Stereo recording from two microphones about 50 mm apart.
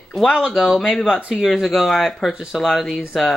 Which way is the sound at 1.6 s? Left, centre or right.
Centre.